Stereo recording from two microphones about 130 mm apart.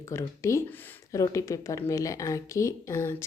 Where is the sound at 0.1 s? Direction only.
20° left (ahead or behind).